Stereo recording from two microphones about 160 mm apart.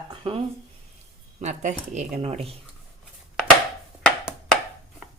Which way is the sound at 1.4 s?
45° right (ahead or behind).